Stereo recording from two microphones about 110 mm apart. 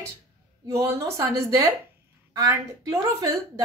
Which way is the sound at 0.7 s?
25° right (ahead or behind).